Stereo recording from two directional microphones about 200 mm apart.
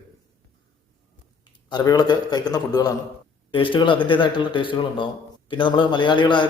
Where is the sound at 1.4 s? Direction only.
20° left (ahead or behind).